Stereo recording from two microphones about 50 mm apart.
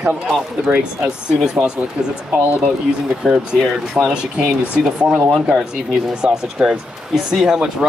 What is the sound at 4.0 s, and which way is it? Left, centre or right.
Speech, right.